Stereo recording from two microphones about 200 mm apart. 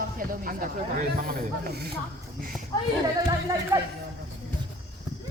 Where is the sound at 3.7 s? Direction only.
15° right (ahead or behind).